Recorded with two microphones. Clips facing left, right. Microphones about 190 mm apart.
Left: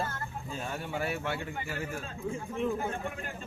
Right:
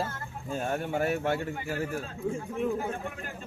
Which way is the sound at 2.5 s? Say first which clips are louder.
Left 1 dB; 5° right (ahead or behind).